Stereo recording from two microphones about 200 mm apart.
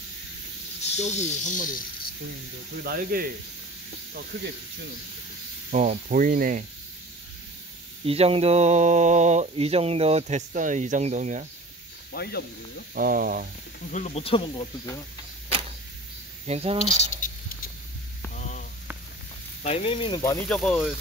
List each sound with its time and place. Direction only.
0.9 s speech: 35° left (ahead or behind)
2.8 s speech: 50° right (ahead or behind)
5.7 s speech: 40° right (ahead or behind)
8.0 s speech: 30° right (ahead or behind)
12.1 s speech: 50° left (ahead or behind)
12.9 s speech: 45° right (ahead or behind)
13.9 s speech: 30° left (ahead or behind)
16.4 s speech: 30° right (ahead or behind)
17.2 s a sound: 40° left (ahead or behind)
19.6 s speech: 30° left (ahead or behind)
20.4 s speech: centre (ahead or behind)